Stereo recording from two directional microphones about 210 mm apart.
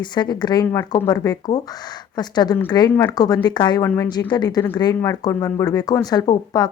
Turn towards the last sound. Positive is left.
turn(degrees=20)  # may be behind; listen again after turning